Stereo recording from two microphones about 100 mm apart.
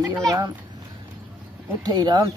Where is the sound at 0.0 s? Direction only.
35° right (ahead or behind).